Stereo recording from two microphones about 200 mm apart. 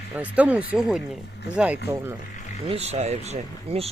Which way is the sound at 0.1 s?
5° right (ahead or behind).